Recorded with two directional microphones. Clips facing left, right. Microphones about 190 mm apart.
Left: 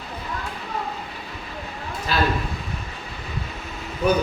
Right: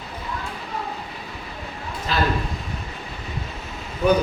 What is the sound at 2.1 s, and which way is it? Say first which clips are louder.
Speech: left 1 dB; 5° left (ahead or behind).